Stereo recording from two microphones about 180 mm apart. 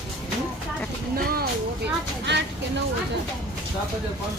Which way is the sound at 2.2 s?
75° right (ahead or behind).